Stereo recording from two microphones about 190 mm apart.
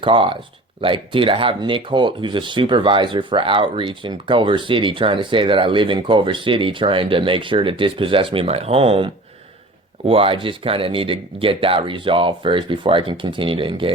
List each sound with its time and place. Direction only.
0.0 s speech: 25° right (ahead or behind)
10.1 s speech: 30° right (ahead or behind)